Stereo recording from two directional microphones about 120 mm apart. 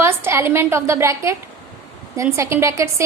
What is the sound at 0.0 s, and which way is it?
A woman's voice, 20° right (ahead or behind).